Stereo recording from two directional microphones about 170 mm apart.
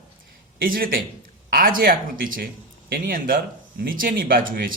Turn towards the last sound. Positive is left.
turn(degrees=-55)  # may be behind; listen again after turning